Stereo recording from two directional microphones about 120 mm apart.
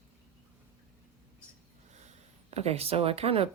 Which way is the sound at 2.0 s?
65° right (ahead or behind).